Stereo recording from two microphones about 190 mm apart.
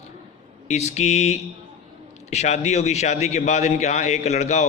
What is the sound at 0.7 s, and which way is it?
A man's voice, 35° left (ahead or behind).